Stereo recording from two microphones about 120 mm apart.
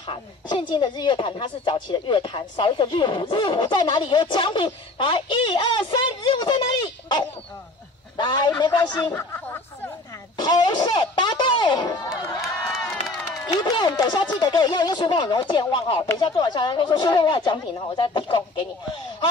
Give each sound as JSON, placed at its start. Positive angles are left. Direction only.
{"t": 0.0, "sound": "speech", "side_deg": 45}
{"t": 9.1, "sound": "speech", "side_deg": 20}
{"t": 10.4, "sound": "speech", "side_deg": 40}
{"t": 13.0, "sound": "run", "side_deg": 0}
{"t": 13.5, "sound": "speech", "side_deg": 35}